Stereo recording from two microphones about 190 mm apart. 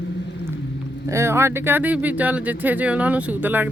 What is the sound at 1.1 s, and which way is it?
Speech, 15° right (ahead or behind).